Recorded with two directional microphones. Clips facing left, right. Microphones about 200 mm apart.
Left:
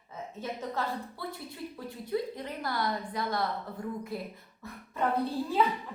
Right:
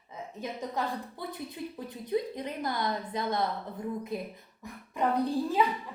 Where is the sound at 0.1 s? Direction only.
15° right (ahead or behind).